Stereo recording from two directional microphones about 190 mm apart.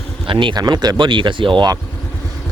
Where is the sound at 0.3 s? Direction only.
25° right (ahead or behind).